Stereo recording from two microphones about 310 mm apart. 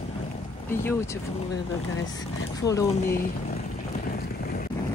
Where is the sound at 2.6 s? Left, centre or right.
Centre.